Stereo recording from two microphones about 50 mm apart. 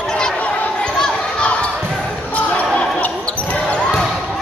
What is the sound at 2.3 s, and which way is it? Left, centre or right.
Basketball bounce, left.